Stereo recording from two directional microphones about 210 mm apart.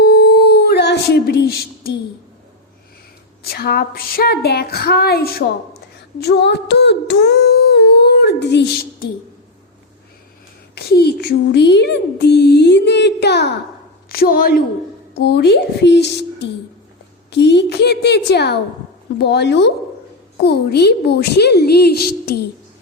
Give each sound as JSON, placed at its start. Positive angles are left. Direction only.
{"t": 0.0, "sound": "a sound", "side_deg": 45}
{"t": 3.4, "sound": "speech", "side_deg": 45}
{"t": 6.1, "sound": "humming", "side_deg": 50}
{"t": 10.8, "sound": "speech", "side_deg": 50}